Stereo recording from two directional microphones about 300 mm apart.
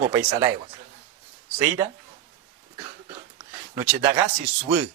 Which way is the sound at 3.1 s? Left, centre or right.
Centre.